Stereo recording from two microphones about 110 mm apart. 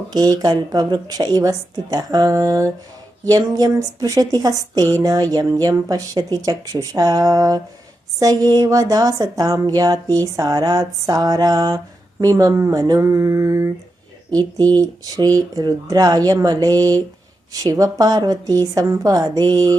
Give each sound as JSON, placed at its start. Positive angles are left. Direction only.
{"t": 0.1, "sound": "a woman's voice", "side_deg": -35}
{"t": 12.2, "sound": "a sound", "side_deg": -30}
{"t": 14.3, "sound": "a woman's voice", "side_deg": -35}